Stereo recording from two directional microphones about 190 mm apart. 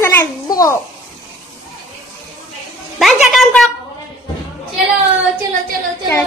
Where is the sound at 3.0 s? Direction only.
Centre (ahead or behind).